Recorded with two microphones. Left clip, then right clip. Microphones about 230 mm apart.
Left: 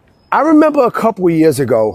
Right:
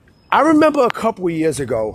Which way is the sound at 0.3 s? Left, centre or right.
Left.